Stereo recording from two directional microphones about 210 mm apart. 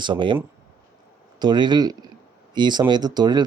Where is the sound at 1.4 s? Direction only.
20° right (ahead or behind).